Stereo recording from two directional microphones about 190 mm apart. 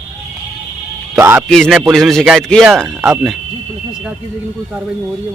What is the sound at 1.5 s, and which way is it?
A man's voice, centre (ahead or behind).